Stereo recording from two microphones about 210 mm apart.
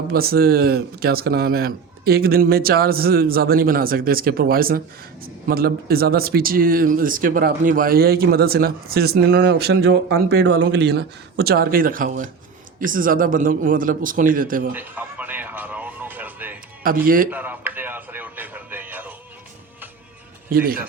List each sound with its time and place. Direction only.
0.1 s a man's voice: 45° right (ahead or behind)
14.7 s music: 10° right (ahead or behind)
16.8 s speech: 45° right (ahead or behind)
17.3 s music: 10° right (ahead or behind)
20.5 s speech: 45° right (ahead or behind)